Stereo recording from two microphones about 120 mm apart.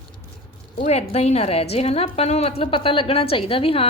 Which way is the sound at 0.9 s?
65° left (ahead or behind).